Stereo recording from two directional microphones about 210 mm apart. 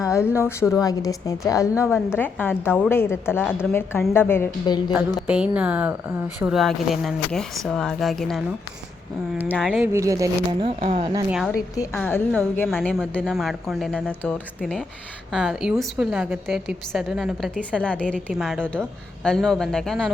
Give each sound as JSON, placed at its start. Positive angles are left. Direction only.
{"t": 0.0, "sound": "a woman's voice", "side_deg": 15}
{"t": 5.2, "sound": "speech", "side_deg": -5}
{"t": 9.6, "sound": "speech", "side_deg": -5}
{"t": 10.8, "sound": "speech", "side_deg": -25}
{"t": 11.3, "sound": "speech", "side_deg": 0}
{"t": 11.9, "sound": "a woman's voice", "side_deg": 10}